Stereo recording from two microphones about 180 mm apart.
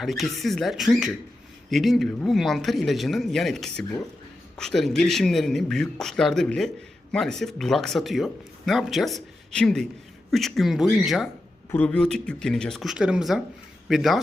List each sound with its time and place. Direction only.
0.0 s speech: centre (ahead or behind)